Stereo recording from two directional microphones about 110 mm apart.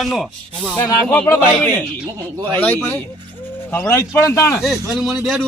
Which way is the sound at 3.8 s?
30° left (ahead or behind).